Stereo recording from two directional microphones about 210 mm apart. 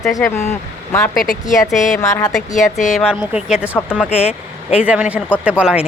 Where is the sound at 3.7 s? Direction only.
10° left (ahead or behind).